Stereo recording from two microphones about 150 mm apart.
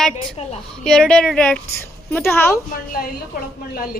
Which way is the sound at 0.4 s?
40° left (ahead or behind).